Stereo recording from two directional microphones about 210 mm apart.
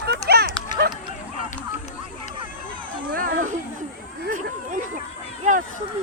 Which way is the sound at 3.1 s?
40° right (ahead or behind).